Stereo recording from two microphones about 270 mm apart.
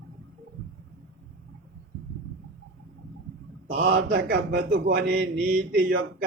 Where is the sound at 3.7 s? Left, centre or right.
Right.